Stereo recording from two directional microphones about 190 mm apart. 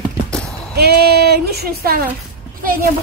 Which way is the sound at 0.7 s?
60° right (ahead or behind).